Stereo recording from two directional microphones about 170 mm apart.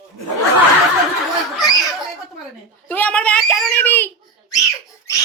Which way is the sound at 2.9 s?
10° left (ahead or behind).